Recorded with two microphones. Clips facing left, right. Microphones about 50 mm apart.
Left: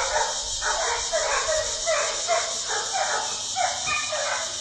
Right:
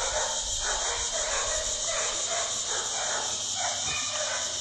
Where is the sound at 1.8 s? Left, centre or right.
Left.